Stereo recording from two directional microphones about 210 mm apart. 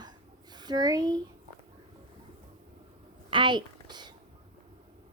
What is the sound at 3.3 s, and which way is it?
Speech, 20° right (ahead or behind).